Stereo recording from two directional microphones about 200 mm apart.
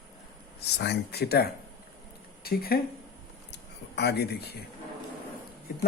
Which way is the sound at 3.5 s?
55° left (ahead or behind).